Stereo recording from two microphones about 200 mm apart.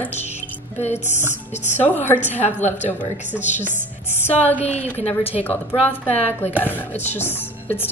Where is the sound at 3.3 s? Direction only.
Centre (ahead or behind).